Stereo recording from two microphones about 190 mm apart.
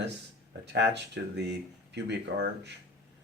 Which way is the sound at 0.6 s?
65° right (ahead or behind).